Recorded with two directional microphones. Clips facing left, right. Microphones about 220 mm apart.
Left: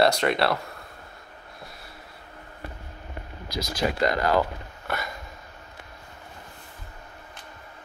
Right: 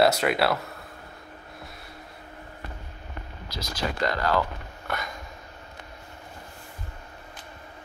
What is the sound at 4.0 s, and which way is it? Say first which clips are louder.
Speech: left 2 dB; 15° left (ahead or behind).